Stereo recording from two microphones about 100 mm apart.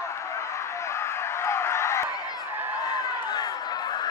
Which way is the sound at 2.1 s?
40° left (ahead or behind).